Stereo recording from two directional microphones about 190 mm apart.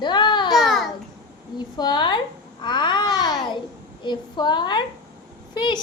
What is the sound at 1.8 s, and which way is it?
Speech, 25° left (ahead or behind).